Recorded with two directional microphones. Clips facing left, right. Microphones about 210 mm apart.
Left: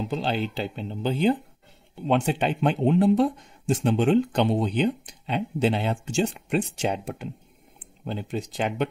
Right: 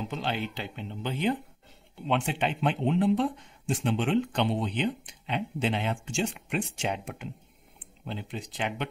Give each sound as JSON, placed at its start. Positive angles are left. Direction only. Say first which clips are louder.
{"t": 0.1, "sound": "speech", "louder": "left 5 dB", "side_deg": 35}